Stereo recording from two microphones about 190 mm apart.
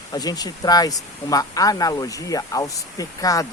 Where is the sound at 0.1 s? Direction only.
20° left (ahead or behind).